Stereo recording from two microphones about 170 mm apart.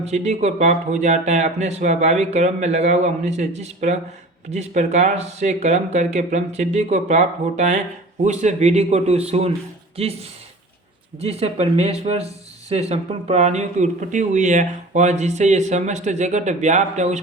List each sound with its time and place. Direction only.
0.0 s speech: 40° right (ahead or behind)